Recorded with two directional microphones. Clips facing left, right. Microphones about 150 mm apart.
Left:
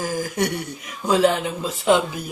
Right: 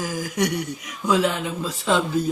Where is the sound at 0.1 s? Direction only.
50° left (ahead or behind).